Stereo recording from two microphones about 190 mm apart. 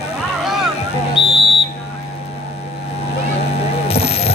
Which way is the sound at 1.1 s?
25° left (ahead or behind).